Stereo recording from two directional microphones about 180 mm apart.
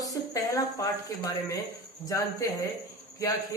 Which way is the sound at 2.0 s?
20° left (ahead or behind).